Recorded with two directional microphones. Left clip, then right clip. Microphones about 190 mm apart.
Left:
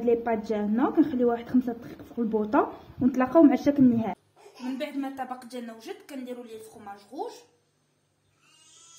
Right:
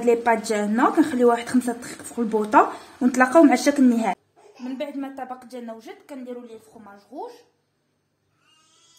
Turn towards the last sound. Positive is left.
turn(degrees=-50)  # may be behind; listen again after turning